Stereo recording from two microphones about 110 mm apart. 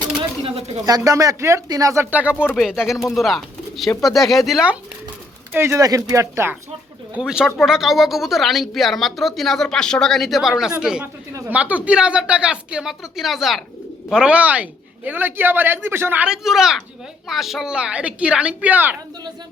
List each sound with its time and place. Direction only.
0.4 s speech: 60° right (ahead or behind)
0.9 s speech: 35° right (ahead or behind)
2.0 s a woman's voice: 15° right (ahead or behind)
5.5 s speech: 20° right (ahead or behind)
5.8 s speech: 35° right (ahead or behind)
7.1 s a woman's voice: 5° right (ahead or behind)
11.0 s speech: 20° right (ahead or behind)
16.2 s a woman's voice: 5° right (ahead or behind)